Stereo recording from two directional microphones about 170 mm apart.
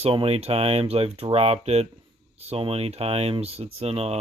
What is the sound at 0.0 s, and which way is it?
Speech, 35° right (ahead or behind).